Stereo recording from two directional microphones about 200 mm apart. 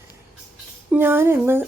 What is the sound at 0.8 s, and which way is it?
Speech, 10° right (ahead or behind).